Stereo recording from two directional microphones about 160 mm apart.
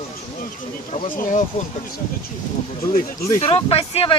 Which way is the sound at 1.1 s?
55° left (ahead or behind).